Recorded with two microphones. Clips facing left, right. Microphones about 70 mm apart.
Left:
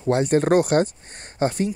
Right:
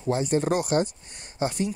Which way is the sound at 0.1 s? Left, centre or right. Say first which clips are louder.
Left 6 dB; left.